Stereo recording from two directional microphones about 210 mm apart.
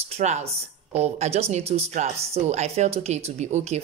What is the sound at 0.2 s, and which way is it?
A woman's voice, 35° right (ahead or behind).